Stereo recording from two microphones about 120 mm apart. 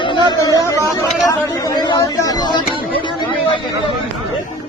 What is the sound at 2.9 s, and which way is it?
Chatter, 45° left (ahead or behind).